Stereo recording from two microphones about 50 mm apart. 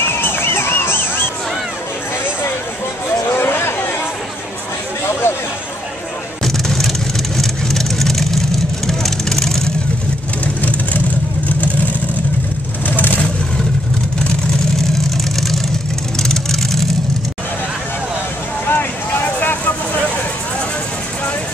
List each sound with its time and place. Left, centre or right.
0.0 s music: left
3.3 s a sound: left
5.2 s a sound: left
6.4 s vehicle: centre
10.4 s vehicle: left
15.3 s vehicle: centre
18.7 s vehicle: left